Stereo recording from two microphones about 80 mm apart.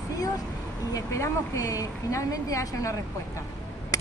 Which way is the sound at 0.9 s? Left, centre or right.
Left.